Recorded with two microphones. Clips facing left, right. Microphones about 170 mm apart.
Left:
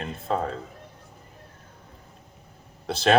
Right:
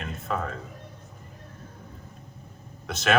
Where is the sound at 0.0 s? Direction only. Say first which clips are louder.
Left 3 dB; 30° left (ahead or behind).